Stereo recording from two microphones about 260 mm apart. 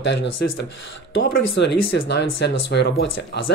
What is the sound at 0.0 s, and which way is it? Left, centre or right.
Speech, left.